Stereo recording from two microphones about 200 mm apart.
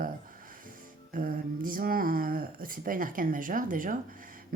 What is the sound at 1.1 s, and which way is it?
Speech, 45° right (ahead or behind).